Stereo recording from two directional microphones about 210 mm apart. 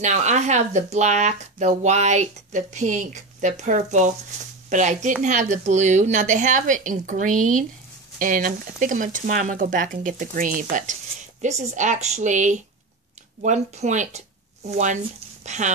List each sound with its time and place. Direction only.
0.0 s speech: 35° right (ahead or behind)
15.4 s speech: 35° right (ahead or behind)